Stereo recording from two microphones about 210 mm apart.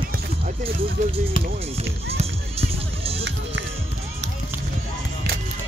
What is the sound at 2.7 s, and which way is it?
Music, 25° right (ahead or behind).